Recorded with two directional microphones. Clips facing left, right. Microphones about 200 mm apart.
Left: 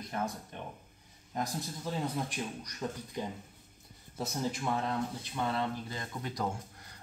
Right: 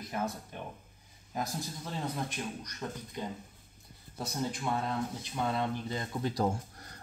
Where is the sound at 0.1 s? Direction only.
10° right (ahead or behind).